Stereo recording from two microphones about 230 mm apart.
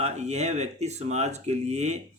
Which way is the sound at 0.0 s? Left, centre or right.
Right.